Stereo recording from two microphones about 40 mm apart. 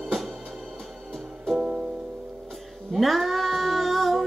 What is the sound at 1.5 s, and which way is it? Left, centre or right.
Music, right.